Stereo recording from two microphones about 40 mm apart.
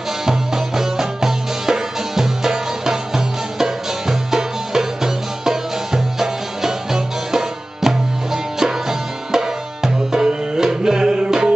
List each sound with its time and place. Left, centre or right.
0.2 s music: centre